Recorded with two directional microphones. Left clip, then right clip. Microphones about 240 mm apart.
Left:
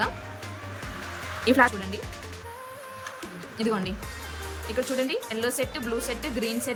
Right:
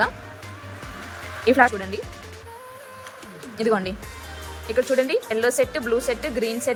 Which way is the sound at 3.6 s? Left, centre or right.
Centre.